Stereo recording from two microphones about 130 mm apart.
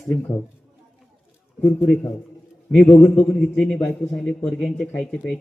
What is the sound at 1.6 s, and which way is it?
A man's voice, 15° left (ahead or behind).